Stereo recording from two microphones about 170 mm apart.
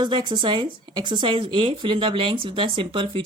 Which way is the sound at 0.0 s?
25° right (ahead or behind).